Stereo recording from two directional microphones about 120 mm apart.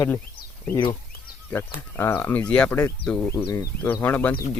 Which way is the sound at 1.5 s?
20° left (ahead or behind).